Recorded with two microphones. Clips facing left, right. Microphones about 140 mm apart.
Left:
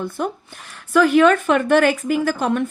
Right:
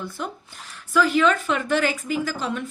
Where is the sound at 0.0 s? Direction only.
55° left (ahead or behind).